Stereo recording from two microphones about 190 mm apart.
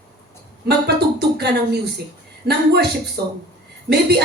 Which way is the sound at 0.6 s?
60° right (ahead or behind).